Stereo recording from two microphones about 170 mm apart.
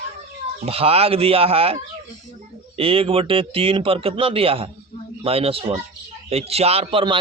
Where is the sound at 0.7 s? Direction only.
35° right (ahead or behind).